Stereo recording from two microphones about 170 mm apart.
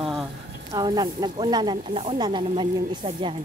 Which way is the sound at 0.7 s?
25° right (ahead or behind).